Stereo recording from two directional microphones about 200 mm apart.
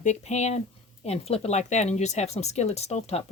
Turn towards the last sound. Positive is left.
turn(degrees=30)  # may be behind; listen again after turning